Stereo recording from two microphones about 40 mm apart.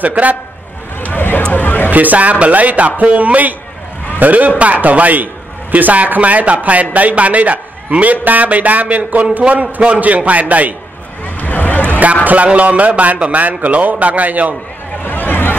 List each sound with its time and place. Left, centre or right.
0.0 s a man's voice: right
1.1 s vehicle: left
1.5 s hubbub: left
1.9 s a man's voice: right
9.4 s a man's voice: right
11.4 s a sound: left
12.0 s a man's voice: right
15.0 s vehicle: left